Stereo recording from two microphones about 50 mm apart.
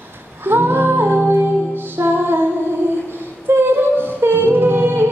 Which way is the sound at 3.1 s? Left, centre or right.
Right.